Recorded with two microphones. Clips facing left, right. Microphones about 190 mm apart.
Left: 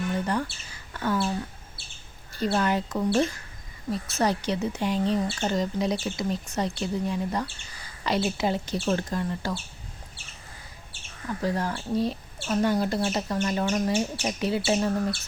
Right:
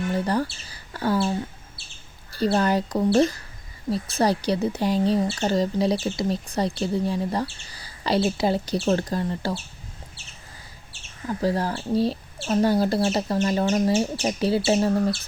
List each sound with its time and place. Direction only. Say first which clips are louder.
0.1 s speech: right 4 dB; 35° right (ahead or behind)
2.3 s speech: right 4 dB; 35° right (ahead or behind)
11.3 s speech: right 4 dB; 35° right (ahead or behind)